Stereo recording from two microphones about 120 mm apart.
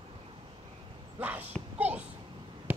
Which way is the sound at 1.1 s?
15° right (ahead or behind).